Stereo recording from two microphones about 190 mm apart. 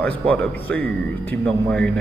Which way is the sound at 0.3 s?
10° left (ahead or behind).